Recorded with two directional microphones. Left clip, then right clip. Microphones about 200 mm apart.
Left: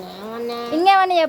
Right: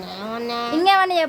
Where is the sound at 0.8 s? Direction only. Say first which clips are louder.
Left 2 dB; 15° left (ahead or behind).